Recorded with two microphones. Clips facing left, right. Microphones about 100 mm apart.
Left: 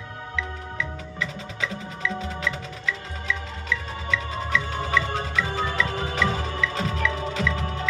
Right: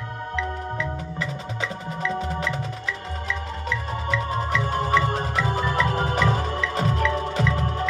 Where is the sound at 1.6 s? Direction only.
40° right (ahead or behind).